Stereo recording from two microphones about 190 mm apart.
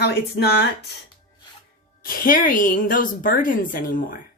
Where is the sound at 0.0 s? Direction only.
55° left (ahead or behind).